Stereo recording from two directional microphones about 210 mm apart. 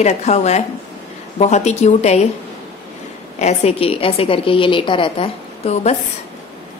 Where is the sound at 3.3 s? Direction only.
30° left (ahead or behind).